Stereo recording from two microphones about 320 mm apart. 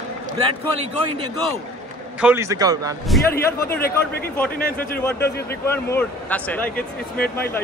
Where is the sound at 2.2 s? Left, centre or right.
Centre.